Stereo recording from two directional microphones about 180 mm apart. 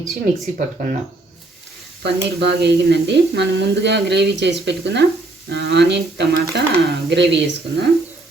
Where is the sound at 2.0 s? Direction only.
65° right (ahead or behind).